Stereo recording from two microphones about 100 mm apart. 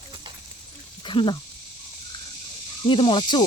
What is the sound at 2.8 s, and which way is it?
Speech, 55° left (ahead or behind).